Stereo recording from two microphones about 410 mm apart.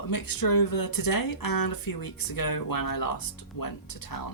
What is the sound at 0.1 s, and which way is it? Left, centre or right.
Speech, left.